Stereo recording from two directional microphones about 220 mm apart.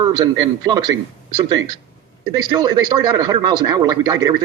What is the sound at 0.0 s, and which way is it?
A man's voice, 20° right (ahead or behind).